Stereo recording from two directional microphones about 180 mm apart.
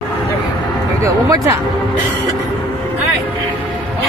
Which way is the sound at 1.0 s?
15° right (ahead or behind).